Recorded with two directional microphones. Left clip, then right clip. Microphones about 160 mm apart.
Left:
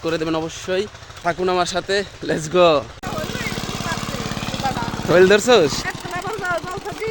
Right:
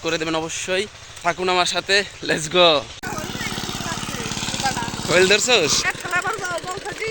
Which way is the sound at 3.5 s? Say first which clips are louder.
Left 1 dB; 35° left (ahead or behind).